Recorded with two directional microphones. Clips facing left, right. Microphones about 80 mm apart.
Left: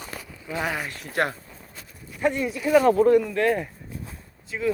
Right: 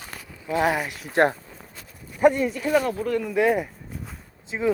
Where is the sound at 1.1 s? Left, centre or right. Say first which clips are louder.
Right 6 dB; right.